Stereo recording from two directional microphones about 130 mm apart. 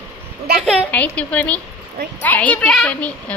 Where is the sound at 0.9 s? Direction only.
10° left (ahead or behind).